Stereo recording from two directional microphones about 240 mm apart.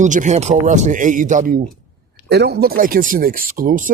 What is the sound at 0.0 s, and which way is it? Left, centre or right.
Speech, right.